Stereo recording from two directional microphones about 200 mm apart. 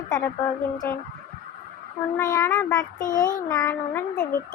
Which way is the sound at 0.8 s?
10° left (ahead or behind).